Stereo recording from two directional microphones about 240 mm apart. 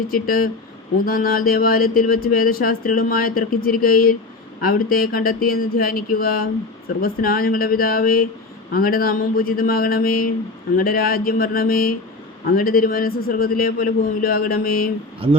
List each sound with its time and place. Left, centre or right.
0.1 s speech: left